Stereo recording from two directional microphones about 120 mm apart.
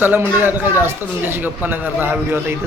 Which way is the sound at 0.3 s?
15° right (ahead or behind).